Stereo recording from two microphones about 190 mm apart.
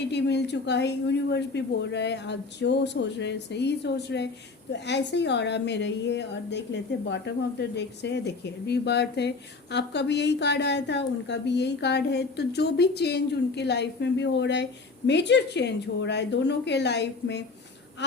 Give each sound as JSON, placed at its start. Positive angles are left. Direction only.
{"t": 0.1, "sound": "speech", "side_deg": 65}